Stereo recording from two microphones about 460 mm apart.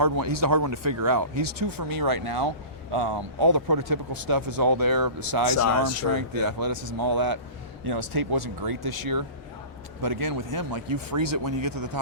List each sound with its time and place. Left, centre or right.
0.0 s speech: right
5.5 s speech: left
6.1 s speech: right